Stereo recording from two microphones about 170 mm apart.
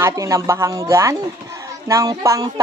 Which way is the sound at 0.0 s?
20° right (ahead or behind).